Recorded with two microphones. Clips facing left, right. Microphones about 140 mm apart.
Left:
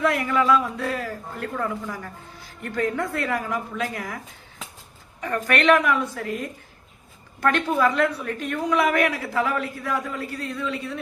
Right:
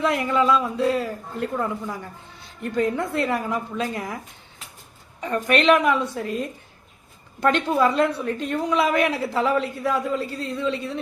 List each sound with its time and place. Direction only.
0.0 s a woman's voice: 25° right (ahead or behind)
5.2 s a woman's voice: 20° right (ahead or behind)